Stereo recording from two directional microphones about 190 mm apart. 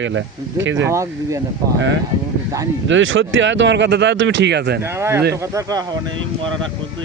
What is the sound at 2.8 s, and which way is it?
Speech, 85° right.